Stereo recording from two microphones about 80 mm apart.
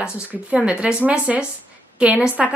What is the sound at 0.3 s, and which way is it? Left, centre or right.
Speech, centre.